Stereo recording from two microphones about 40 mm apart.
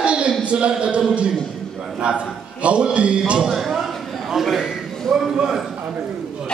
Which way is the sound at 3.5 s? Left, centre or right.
Centre.